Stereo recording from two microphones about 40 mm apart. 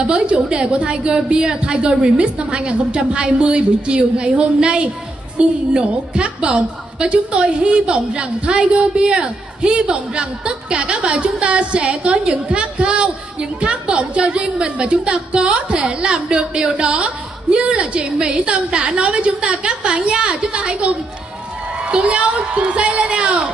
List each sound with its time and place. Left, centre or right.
0.0 s a woman's voice: right